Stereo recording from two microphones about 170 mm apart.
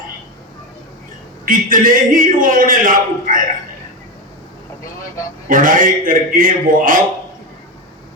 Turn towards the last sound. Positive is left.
turn(degrees=-55)  # may be behind; listen again after turning